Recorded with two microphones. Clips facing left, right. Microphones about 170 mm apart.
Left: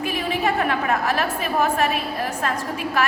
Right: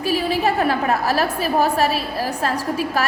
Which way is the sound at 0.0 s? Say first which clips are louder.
Right 4 dB; 35° right (ahead or behind).